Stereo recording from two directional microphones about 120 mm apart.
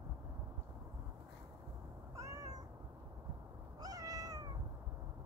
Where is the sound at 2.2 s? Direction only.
25° right (ahead or behind).